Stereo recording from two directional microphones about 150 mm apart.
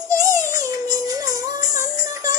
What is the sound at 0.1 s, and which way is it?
Music, 25° right (ahead or behind).